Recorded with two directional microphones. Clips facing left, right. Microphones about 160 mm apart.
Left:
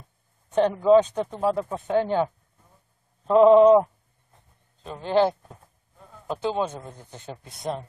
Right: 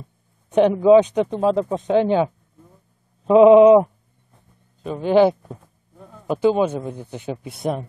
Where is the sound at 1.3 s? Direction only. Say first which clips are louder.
Right 4 dB; 20° right (ahead or behind).